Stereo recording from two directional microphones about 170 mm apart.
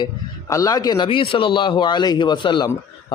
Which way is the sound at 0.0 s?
20° left (ahead or behind).